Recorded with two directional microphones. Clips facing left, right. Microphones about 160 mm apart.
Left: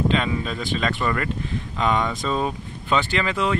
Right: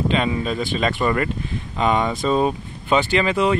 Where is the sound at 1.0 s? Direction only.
20° right (ahead or behind).